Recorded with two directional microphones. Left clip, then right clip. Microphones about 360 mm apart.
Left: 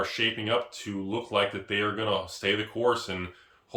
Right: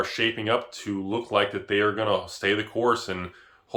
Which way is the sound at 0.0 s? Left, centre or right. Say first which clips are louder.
Right 2 dB; centre.